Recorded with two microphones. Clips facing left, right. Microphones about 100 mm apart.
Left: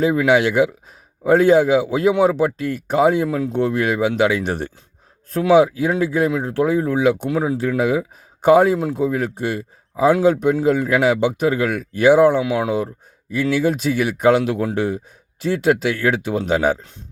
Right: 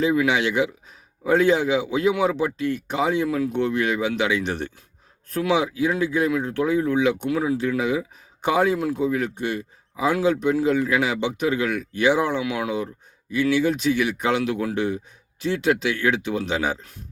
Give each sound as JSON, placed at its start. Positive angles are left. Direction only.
{"t": 0.3, "sound": "speech", "side_deg": 40}
{"t": 3.2, "sound": "speech", "side_deg": 25}